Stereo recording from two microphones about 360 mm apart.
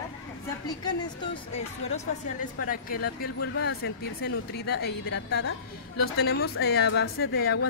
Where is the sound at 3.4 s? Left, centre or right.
Left.